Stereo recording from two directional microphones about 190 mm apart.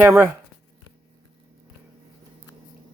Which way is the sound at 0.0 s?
10° right (ahead or behind).